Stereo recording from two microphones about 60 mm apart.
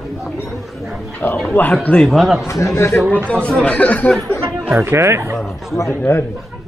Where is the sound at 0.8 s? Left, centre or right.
Centre.